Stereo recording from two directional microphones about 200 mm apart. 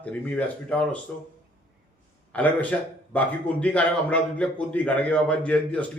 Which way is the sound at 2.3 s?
5° left (ahead or behind).